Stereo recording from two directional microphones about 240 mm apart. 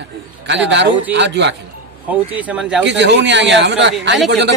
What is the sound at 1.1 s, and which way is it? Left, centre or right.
Speech, right.